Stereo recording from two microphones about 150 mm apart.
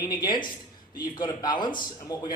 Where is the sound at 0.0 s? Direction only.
25° left (ahead or behind).